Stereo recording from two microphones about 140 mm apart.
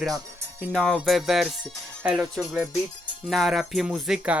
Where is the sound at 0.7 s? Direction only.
5° left (ahead or behind).